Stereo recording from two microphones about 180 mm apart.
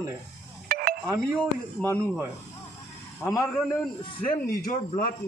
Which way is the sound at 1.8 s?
5° left (ahead or behind).